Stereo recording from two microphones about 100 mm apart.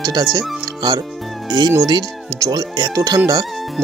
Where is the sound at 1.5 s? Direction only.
40° right (ahead or behind).